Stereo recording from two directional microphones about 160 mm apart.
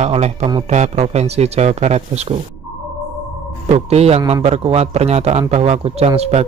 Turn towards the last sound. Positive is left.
turn(degrees=-40)  # may be behind; listen again after turning